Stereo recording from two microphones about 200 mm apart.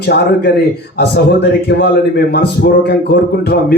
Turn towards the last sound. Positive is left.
turn(degrees=55)  # may be behind; listen again after turning